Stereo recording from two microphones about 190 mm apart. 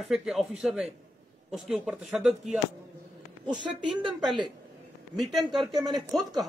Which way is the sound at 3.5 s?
25° right (ahead or behind).